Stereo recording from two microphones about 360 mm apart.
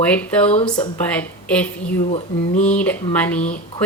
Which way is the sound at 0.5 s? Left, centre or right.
Centre.